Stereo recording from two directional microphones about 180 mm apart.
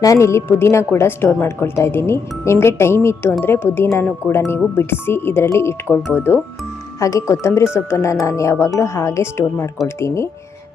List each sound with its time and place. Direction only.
0.0 s a woman's voice: 15° left (ahead or behind)